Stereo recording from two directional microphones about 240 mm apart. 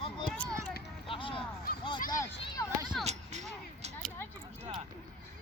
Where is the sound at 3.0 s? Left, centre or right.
Right.